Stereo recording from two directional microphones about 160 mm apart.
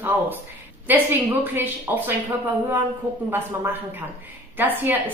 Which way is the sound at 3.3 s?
15° right (ahead or behind).